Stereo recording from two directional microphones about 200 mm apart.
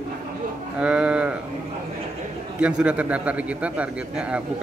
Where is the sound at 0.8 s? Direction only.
5° right (ahead or behind).